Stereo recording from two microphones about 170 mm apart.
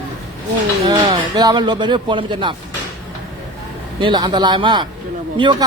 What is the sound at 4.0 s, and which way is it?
Speech, 25° right (ahead or behind).